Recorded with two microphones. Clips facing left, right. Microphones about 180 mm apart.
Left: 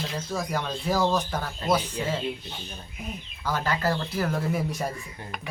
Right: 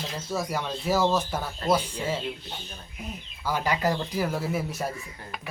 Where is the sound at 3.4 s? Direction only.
10° right (ahead or behind).